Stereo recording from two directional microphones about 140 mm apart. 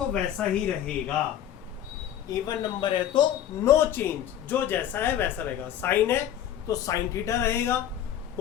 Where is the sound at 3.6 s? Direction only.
15° left (ahead or behind).